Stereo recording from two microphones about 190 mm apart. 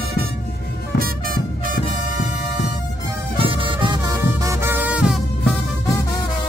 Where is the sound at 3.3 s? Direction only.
25° right (ahead or behind); by 5.2 s 5° right (ahead or behind).